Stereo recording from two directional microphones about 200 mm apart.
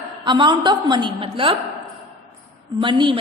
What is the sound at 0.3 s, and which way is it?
A woman's voice, 20° right (ahead or behind).